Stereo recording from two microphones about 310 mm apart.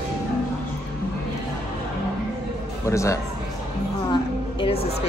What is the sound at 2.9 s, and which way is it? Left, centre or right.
Speech, centre.